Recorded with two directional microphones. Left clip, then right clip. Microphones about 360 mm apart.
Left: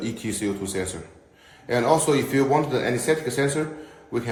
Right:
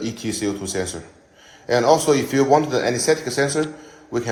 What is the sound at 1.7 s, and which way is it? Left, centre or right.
A man's voice, centre.